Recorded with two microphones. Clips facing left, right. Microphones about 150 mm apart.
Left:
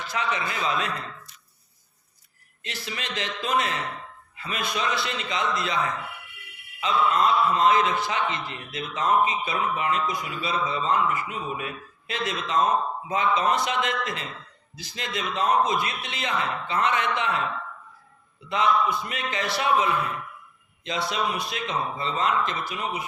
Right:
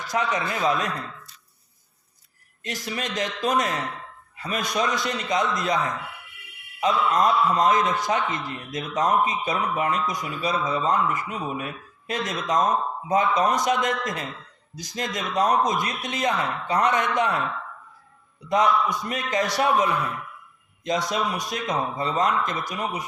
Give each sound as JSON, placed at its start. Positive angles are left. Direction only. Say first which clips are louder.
{"t": 0.0, "sound": "speech", "louder": "right 3 dB", "side_deg": -40}
{"t": 2.6, "sound": "speech", "louder": "right 5 dB", "side_deg": -45}
{"t": 18.4, "sound": "speech", "louder": "right 2 dB", "side_deg": -45}